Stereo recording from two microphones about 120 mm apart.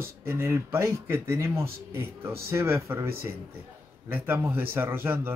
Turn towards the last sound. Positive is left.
turn(degrees=-20)  # may be behind; listen again after turning